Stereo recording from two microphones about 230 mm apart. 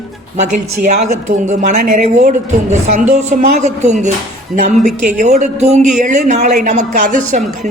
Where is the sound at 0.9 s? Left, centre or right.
Right.